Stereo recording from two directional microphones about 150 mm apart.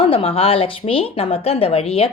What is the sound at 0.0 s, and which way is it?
Speech, 40° left (ahead or behind).